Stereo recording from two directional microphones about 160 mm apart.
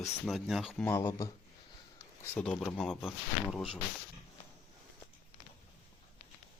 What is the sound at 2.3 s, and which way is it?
Speech, 5° left (ahead or behind).